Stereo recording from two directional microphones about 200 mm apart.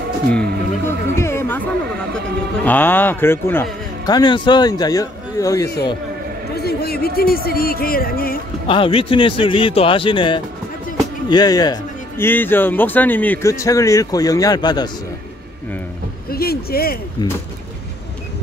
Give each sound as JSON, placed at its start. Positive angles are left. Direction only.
{"t": 0.3, "sound": "speech", "side_deg": 10}
{"t": 2.6, "sound": "speech", "side_deg": 10}
{"t": 6.5, "sound": "speech", "side_deg": 50}
{"t": 8.6, "sound": "speech", "side_deg": 25}
{"t": 16.3, "sound": "a sound", "side_deg": 50}